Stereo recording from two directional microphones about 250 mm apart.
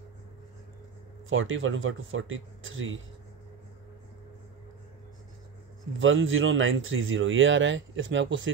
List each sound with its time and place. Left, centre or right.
1.3 s speech: right
5.9 s speech: right